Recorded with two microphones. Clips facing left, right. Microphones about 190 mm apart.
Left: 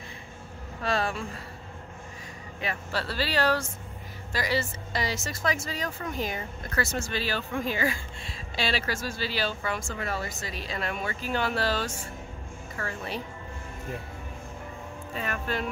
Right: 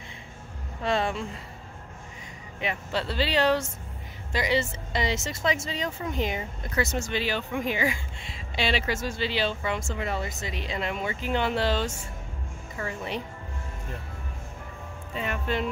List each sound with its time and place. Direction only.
0.8 s speech: 20° right (ahead or behind)
2.6 s speech: 20° right (ahead or behind)
15.1 s speech: 20° right (ahead or behind)